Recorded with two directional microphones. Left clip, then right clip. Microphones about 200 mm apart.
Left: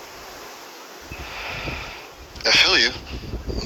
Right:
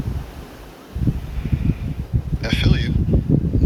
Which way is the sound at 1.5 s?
15° left (ahead or behind).